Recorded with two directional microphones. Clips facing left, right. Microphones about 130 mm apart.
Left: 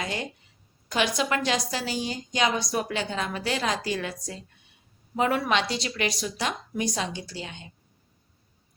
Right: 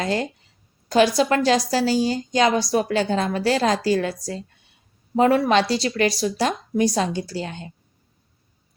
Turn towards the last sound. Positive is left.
turn(degrees=-40)  # may be behind; listen again after turning